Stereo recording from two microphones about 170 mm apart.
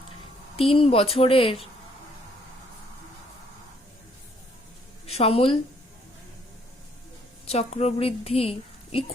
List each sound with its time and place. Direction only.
0.5 s speech: 35° left (ahead or behind)
5.0 s a woman's voice: 35° left (ahead or behind)
7.4 s a woman's voice: 40° left (ahead or behind)